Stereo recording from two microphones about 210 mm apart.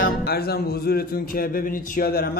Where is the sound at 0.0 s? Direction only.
50° left (ahead or behind).